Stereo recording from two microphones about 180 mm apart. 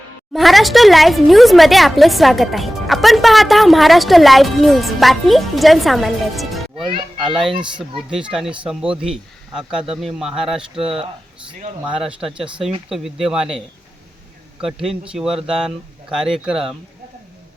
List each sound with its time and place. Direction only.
0.3 s speech: centre (ahead or behind)
6.8 s a child's voice: 25° right (ahead or behind)
7.3 s speech: centre (ahead or behind)
12.0 s speech: 30° right (ahead or behind)
12.9 s speech: centre (ahead or behind)
14.6 s speech: 5° right (ahead or behind)